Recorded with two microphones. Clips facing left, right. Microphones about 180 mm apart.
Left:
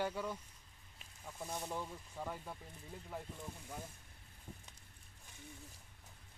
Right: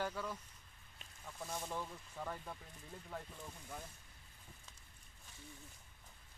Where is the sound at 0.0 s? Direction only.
10° left (ahead or behind).